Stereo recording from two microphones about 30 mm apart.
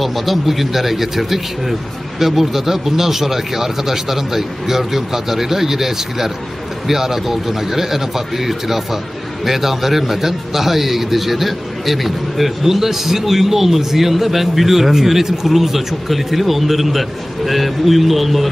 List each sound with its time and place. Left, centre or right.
0.0 s a man's voice: centre